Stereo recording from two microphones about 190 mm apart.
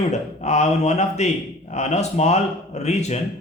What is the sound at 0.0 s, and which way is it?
A man's voice, 35° left (ahead or behind).